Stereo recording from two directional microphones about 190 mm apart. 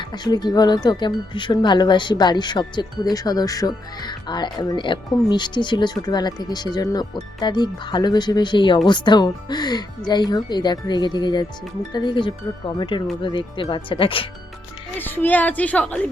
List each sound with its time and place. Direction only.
0.0 s speech: 25° left (ahead or behind)
14.9 s a woman's voice: 10° left (ahead or behind)